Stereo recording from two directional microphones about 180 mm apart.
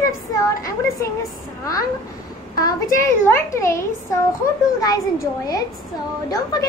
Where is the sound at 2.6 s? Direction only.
15° left (ahead or behind).